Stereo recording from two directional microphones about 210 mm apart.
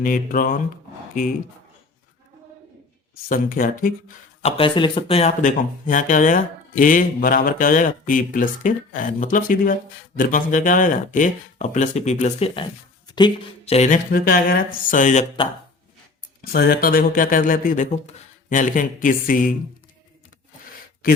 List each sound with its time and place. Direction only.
0.0 s speech: 40° left (ahead or behind)
3.2 s speech: 40° left (ahead or behind)
4.4 s speech: 25° left (ahead or behind)
16.5 s speech: 45° left (ahead or behind)